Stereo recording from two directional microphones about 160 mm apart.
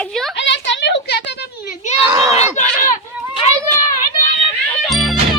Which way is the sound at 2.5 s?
55° left (ahead or behind).